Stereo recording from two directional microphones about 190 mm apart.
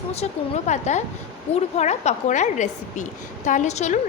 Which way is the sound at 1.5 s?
10° left (ahead or behind).